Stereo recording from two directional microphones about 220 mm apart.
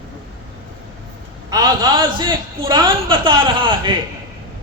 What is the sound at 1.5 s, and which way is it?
A woman's voice, 20° right (ahead or behind).